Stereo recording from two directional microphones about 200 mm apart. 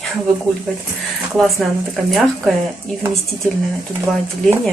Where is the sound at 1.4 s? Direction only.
Centre (ahead or behind).